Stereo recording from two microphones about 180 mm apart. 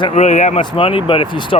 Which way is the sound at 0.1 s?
40° left (ahead or behind).